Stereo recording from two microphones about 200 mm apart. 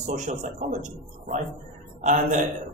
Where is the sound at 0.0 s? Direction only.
40° right (ahead or behind).